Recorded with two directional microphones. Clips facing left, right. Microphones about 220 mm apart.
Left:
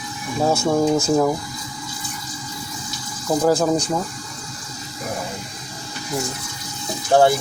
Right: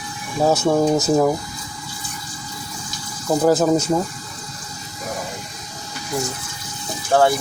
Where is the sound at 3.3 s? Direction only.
5° right (ahead or behind).